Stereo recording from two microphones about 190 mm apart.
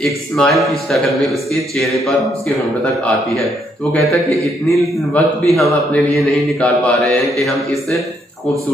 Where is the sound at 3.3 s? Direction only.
Centre (ahead or behind).